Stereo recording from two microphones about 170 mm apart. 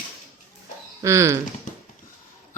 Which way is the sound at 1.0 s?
15° right (ahead or behind).